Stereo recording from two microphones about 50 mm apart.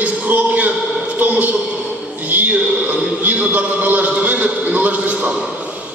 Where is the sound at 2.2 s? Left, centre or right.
Right.